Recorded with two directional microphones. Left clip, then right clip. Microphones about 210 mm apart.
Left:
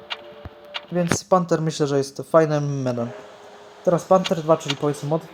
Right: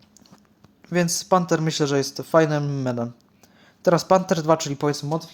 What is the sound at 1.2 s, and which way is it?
Speech, centre (ahead or behind).